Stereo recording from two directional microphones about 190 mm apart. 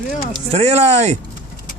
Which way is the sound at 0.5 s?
35° right (ahead or behind).